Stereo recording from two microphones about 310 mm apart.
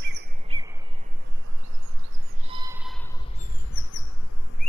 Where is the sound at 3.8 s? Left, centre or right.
Left.